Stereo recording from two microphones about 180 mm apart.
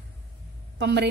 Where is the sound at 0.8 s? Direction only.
70° right (ahead or behind).